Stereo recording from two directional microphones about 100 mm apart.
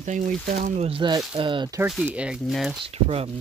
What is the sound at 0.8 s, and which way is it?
Speech, 70° right (ahead or behind).